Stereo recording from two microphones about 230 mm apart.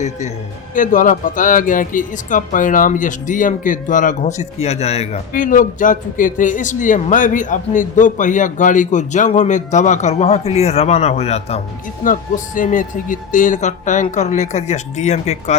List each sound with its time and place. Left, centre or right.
0.7 s speech: left